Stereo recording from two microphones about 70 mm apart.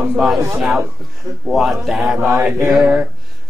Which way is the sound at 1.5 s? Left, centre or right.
Centre.